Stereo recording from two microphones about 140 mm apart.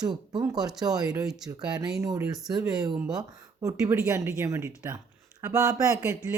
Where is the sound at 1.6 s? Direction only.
30° right (ahead or behind).